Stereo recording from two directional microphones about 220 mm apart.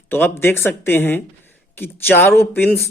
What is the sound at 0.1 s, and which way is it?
Speech, 10° left (ahead or behind).